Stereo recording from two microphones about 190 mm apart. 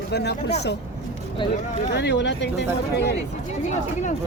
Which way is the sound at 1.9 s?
65° left (ahead or behind).